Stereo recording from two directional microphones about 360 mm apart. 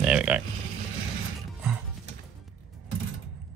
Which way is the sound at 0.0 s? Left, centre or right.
Centre.